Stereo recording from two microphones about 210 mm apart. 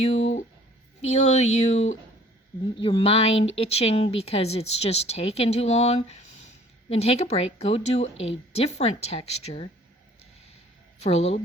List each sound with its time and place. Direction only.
0.0 s a sound: 30° left (ahead or behind)
1.0 s speech: 30° left (ahead or behind)
11.0 s speech: 30° left (ahead or behind)